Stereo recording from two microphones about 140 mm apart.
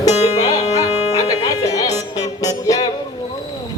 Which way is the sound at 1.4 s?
25° left (ahead or behind).